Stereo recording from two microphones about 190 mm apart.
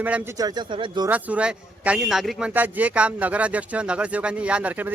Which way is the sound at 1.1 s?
10° right (ahead or behind).